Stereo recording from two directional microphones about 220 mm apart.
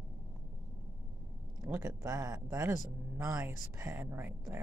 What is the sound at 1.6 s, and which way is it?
Speech, 15° right (ahead or behind).